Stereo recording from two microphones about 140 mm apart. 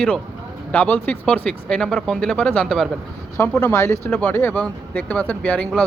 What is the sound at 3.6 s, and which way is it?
Speech, 15° left (ahead or behind).